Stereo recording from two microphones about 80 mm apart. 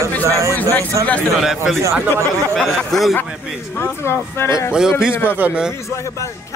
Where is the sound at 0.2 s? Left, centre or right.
Right.